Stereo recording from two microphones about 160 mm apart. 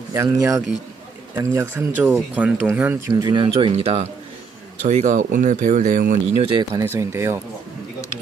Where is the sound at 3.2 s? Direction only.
25° right (ahead or behind); by 6.2 s 55° right (ahead or behind).